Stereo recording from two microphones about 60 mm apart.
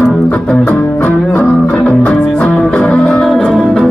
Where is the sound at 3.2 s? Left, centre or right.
Centre.